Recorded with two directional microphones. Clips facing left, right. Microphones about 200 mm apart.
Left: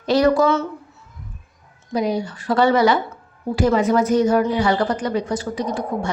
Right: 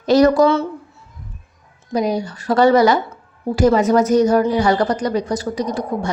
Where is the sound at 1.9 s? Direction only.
40° right (ahead or behind).